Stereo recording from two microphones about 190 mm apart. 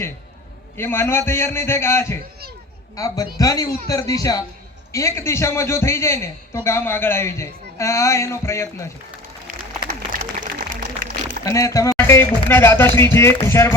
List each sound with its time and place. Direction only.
0.8 s a man's voice: 10° left (ahead or behind)
10.1 s a sound: 45° right (ahead or behind)
11.4 s a man's voice: 20° left (ahead or behind)